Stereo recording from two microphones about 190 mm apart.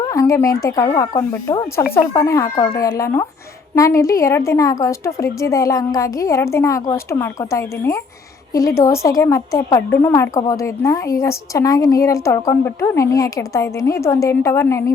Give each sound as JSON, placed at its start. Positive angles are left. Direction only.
{"t": 0.0, "sound": "speech", "side_deg": 15}